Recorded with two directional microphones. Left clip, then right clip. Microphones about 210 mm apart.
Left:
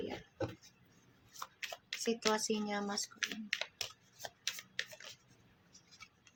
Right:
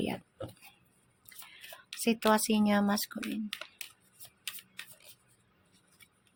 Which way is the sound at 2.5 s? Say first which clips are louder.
Right 10 dB; 40° right (ahead or behind).